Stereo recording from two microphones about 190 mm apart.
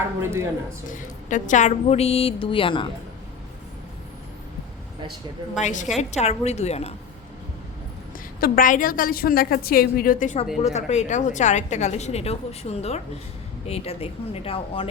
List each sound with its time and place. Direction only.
0.2 s speech: 15° right (ahead or behind)
0.9 s a woman's voice: 40° left (ahead or behind); by 2.9 s 25° left (ahead or behind)
5.5 s a woman's voice: 40° left (ahead or behind)
8.4 s a woman's voice: 50° left (ahead or behind); by 14.8 s 30° left (ahead or behind)